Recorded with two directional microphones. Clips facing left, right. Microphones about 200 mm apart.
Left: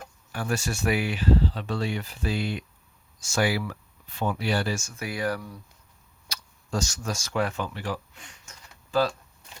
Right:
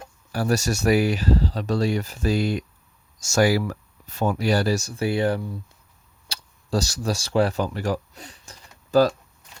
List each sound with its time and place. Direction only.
0.0 s speech: 35° right (ahead or behind)